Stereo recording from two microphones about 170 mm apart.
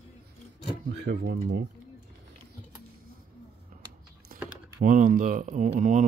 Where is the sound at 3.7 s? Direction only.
50° right (ahead or behind).